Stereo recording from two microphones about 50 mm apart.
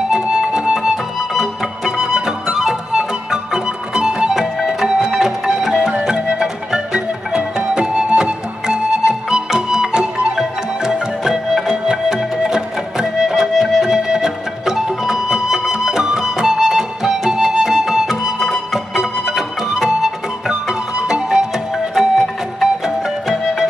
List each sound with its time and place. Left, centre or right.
0.1 s music: centre
21.9 s music: centre